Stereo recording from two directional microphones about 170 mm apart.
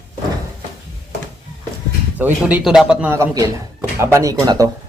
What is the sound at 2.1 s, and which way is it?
Speech, 10° right (ahead or behind).